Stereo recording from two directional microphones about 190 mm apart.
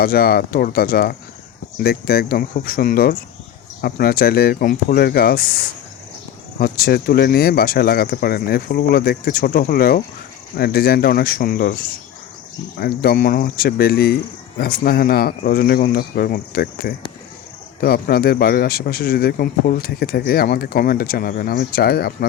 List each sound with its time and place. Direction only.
0.0 s speech: 50° left (ahead or behind)
6.6 s speech: 50° left (ahead or behind)
12.8 s speech: 55° left (ahead or behind)